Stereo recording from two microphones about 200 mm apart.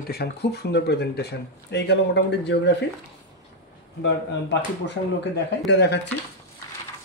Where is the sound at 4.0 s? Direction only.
60° left (ahead or behind).